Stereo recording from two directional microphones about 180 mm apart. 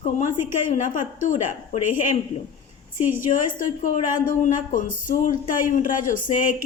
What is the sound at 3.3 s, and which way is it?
A woman's voice, 45° left (ahead or behind).